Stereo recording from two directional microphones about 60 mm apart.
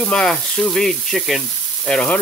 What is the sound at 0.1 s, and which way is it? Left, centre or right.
Sizzle, centre.